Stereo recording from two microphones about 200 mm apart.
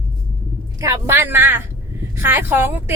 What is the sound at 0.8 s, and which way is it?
Speech, 15° right (ahead or behind).